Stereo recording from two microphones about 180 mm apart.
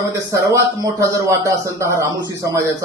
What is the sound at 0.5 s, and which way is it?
A man's voice, 15° right (ahead or behind).